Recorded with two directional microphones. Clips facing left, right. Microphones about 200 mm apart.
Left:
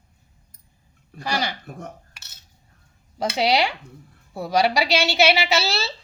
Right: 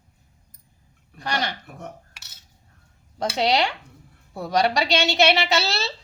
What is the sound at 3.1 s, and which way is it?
A woman's voice, 5° left (ahead or behind).